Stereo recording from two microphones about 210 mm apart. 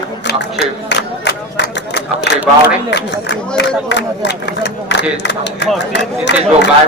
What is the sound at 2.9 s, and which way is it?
A man's voice, 55° left (ahead or behind).